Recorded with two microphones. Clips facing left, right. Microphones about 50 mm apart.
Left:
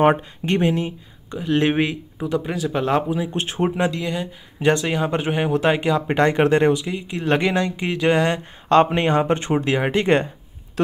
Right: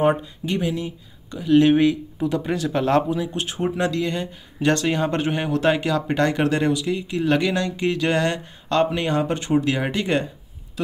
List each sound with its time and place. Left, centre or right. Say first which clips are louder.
0.0 s speech: left 3 dB; left
1.3 s speech: right 4 dB; centre
2.2 s speech: even; centre
3.3 s speech: left 3 dB; left
3.7 s speech: even; centre
8.6 s speech: left 5 dB; left